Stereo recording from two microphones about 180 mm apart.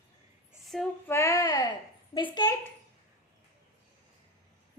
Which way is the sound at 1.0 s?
15° left (ahead or behind).